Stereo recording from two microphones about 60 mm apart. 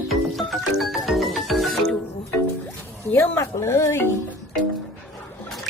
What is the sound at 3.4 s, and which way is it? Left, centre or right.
Speech, left.